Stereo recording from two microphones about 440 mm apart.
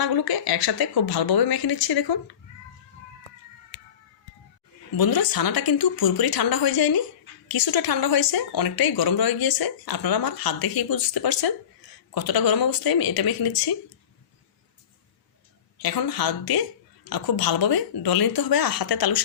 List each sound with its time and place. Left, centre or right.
0.0 s speech: left
4.9 s speech: left
15.8 s speech: left